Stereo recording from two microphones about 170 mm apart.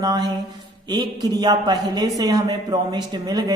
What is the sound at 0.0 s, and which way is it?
Speech, 20° right (ahead or behind).